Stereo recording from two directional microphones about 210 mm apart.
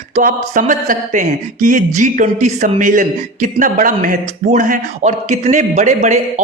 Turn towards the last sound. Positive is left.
turn(degrees=-35)  # may be behind; listen again after turning